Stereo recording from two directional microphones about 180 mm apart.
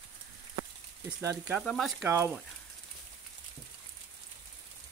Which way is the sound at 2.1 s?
15° right (ahead or behind).